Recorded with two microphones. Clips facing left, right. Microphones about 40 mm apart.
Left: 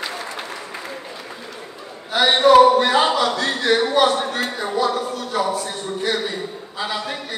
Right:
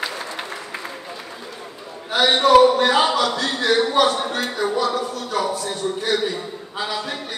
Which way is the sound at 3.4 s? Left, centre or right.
Left.